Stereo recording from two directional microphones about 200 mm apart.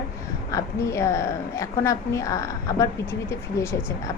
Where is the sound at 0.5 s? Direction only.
15° left (ahead or behind).